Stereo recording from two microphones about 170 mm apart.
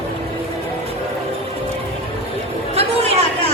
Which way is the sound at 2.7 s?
35° right (ahead or behind).